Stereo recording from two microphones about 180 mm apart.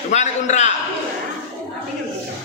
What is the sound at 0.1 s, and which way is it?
Speech, 40° left (ahead or behind).